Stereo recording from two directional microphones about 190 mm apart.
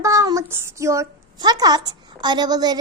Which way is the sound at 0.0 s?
15° right (ahead or behind).